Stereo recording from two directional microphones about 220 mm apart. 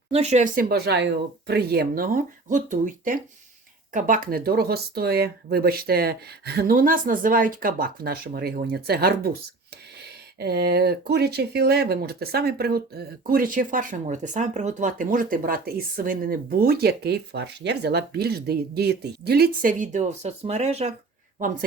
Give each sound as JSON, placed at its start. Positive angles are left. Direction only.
{"t": 0.1, "sound": "speech", "side_deg": -30}